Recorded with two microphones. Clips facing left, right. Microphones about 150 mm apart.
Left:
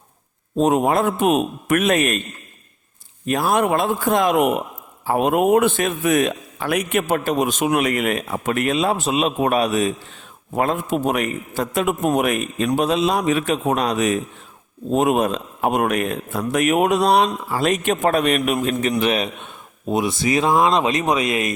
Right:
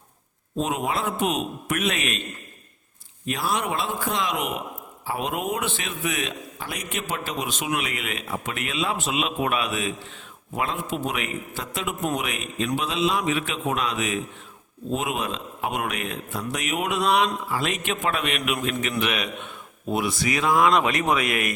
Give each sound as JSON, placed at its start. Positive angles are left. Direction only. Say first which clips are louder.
{"t": 0.5, "sound": "a man's voice", "louder": "left 9 dB", "side_deg": 45}
{"t": 3.2, "sound": "a man's voice", "louder": "left 8 dB", "side_deg": 50}
{"t": 6.6, "sound": "a man's voice", "louder": "left 13 dB", "side_deg": 65}
{"t": 19.9, "sound": "speech", "louder": "left 5 dB", "side_deg": 20}